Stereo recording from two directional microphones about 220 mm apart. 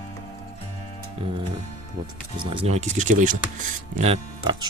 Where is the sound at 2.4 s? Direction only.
25° right (ahead or behind).